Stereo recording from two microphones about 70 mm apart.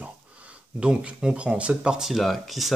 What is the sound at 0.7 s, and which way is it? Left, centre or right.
Speech, centre.